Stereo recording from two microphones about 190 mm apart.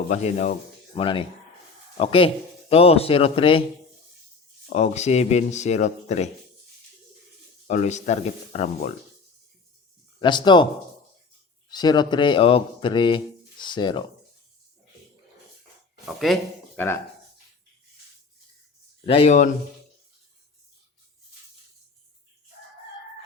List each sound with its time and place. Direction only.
0.1 s speech: 35° left (ahead or behind)
4.7 s speech: 35° left (ahead or behind)
7.7 s speech: 40° left (ahead or behind)
10.2 s speech: 25° left (ahead or behind)
11.7 s speech: 20° left (ahead or behind)
16.0 s speech: centre (ahead or behind)
19.0 s speech: 30° left (ahead or behind)